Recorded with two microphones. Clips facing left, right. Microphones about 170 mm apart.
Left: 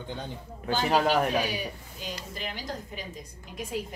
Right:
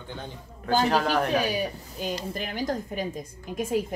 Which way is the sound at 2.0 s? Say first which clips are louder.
Right 7 dB; 45° right (ahead or behind).